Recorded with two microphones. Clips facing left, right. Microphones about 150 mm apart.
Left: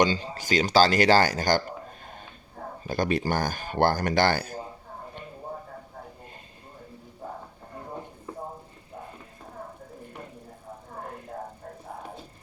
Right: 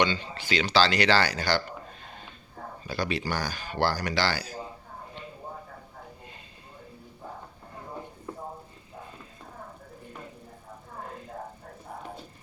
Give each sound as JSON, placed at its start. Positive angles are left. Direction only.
{"t": 0.0, "sound": "speech", "side_deg": 40}
{"t": 2.8, "sound": "speech", "side_deg": 50}